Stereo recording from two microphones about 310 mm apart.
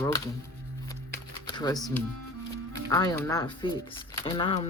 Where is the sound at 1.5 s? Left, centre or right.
Centre.